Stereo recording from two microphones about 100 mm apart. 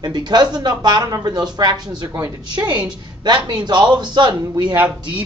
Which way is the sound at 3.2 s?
45° right (ahead or behind).